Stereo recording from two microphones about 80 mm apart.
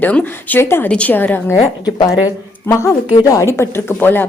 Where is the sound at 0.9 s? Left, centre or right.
Centre.